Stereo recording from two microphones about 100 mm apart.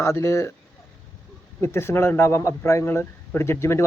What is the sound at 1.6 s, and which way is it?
Speech, 25° left (ahead or behind).